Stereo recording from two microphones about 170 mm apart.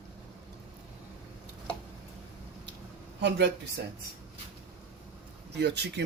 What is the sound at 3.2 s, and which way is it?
Speech, 90° right.